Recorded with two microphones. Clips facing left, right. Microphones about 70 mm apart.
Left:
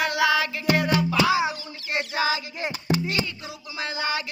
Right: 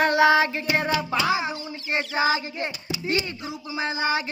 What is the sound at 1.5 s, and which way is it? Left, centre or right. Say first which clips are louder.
Child singing: right 2 dB; right.